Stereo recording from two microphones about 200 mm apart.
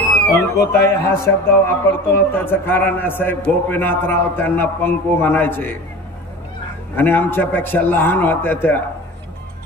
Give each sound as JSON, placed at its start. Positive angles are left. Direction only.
{"t": 0.1, "sound": "a sound", "side_deg": 15}
{"t": 1.2, "sound": "speech", "side_deg": 10}
{"t": 7.0, "sound": "speech", "side_deg": 10}